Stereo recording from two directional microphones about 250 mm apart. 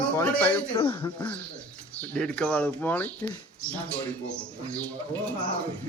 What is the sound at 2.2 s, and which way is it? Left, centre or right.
Speech, centre.